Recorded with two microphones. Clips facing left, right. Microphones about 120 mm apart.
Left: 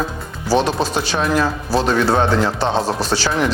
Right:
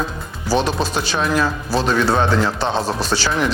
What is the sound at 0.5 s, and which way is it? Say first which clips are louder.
Speech: left 2 dB; 25° left (ahead or behind).